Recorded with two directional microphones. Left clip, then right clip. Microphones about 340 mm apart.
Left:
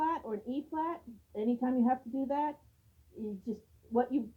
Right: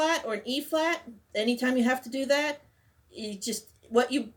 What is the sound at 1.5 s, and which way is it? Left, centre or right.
Speech, centre.